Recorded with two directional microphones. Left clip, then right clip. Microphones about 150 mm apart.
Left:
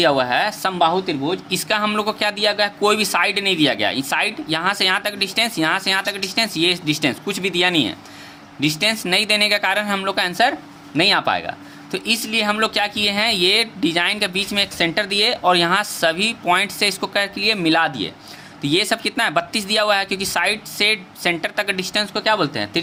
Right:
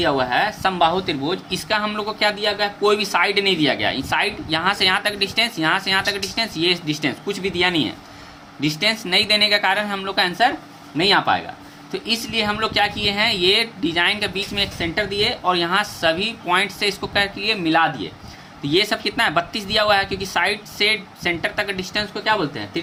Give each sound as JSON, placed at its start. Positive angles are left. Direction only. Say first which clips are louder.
{"t": 0.0, "sound": "speech", "louder": "left 2 dB", "side_deg": 65}
{"t": 0.7, "sound": "speech", "louder": "left 1 dB", "side_deg": 25}
{"t": 1.5, "sound": "speech", "louder": "left 3 dB", "side_deg": 45}
{"t": 11.9, "sound": "speech", "louder": "left 3 dB", "side_deg": 50}
{"t": 18.6, "sound": "speech", "louder": "even", "side_deg": 55}